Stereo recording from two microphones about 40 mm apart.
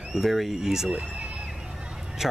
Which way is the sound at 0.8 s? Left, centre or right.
Right.